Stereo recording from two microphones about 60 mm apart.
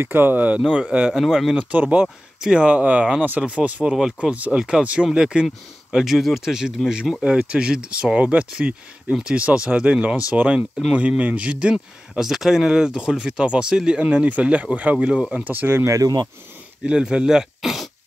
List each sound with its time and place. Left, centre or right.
0.0 s speech: right
0.6 s speech: centre
1.1 s speech: centre
1.6 s speech: right
11.7 s speech: centre
15.5 s speech: right
15.9 s speech: right
16.8 s speech: centre